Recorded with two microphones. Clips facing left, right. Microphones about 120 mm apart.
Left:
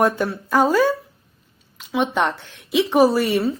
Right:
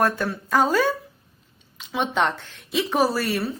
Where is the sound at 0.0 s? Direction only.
15° left (ahead or behind).